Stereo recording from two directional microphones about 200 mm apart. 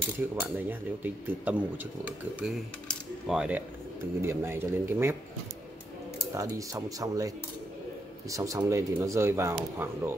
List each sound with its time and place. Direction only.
0.2 s speech: 10° right (ahead or behind)
6.3 s speech: 15° right (ahead or behind)